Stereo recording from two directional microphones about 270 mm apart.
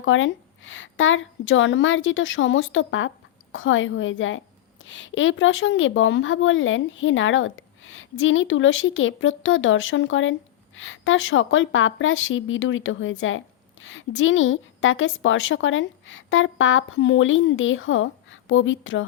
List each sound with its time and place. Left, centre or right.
0.0 s a woman's voice: left